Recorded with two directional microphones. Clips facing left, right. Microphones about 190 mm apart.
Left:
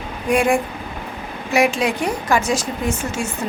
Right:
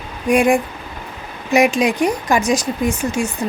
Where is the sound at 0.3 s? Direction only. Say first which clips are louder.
Right 3 dB; 15° right (ahead or behind).